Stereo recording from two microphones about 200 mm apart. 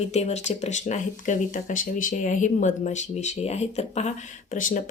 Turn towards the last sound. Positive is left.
turn(degrees=40)  # may be behind; listen again after turning